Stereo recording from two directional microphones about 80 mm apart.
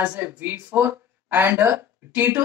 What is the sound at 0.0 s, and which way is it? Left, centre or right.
Speech, right.